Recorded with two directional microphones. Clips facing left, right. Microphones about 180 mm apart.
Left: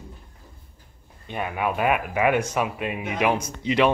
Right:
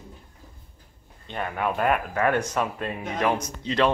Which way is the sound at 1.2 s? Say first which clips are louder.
Left 1 dB; 10° left (ahead or behind).